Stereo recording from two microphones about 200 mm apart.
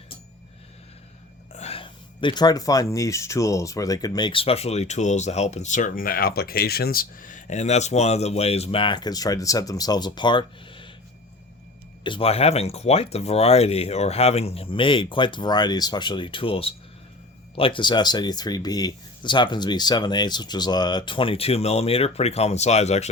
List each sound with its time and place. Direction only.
1.5 s speech: 30° left (ahead or behind)
12.0 s speech: 25° left (ahead or behind)